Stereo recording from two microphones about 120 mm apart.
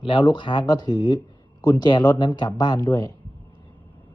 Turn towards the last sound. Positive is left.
turn(degrees=30)  # may be behind; listen again after turning